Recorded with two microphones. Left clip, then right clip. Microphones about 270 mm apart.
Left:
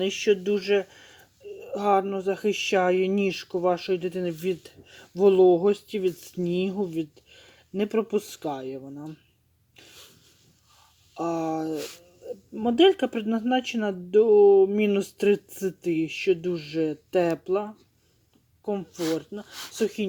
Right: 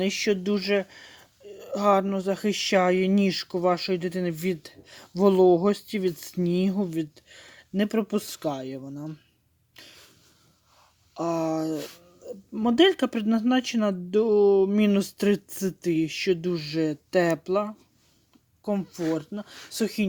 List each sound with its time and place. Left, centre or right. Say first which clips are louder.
0.0 s speech: left 2 dB; right
11.1 s speech: right 1 dB; right